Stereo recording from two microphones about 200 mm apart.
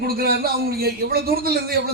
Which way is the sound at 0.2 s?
50° right (ahead or behind).